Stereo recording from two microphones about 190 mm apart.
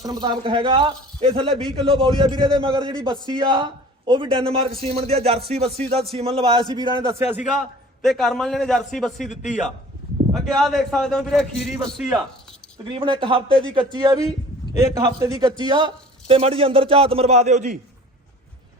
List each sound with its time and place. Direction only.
0.0 s a man's voice: 20° right (ahead or behind)
7.4 s a man's voice: centre (ahead or behind)
12.9 s a man's voice: 25° right (ahead or behind)